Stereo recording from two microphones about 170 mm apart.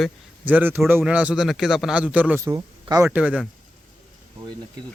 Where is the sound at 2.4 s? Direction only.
20° right (ahead or behind).